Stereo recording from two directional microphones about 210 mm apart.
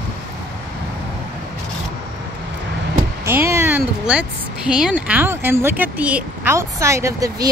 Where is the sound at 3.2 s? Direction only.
10° right (ahead or behind).